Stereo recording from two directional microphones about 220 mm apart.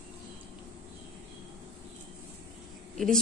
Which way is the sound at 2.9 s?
Centre (ahead or behind).